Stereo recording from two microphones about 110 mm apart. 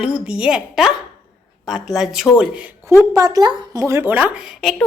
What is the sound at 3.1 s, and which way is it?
A woman's voice, 30° right (ahead or behind).